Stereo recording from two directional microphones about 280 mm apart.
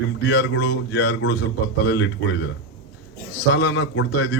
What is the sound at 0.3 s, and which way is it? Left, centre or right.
Speech, left.